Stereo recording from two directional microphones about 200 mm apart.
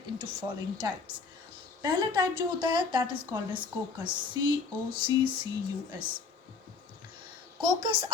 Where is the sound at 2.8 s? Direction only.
25° right (ahead or behind).